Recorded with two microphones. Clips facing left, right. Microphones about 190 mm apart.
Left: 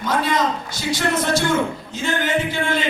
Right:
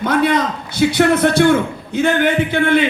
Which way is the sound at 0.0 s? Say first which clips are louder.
Right 5 dB; 60° right (ahead or behind).